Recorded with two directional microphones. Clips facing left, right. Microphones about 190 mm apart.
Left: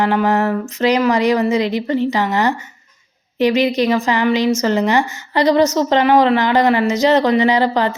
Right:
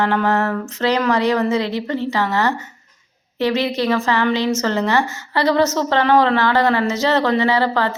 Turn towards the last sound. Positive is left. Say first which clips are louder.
# left 3 dB
turn(degrees=15)  # may be behind; listen again after turning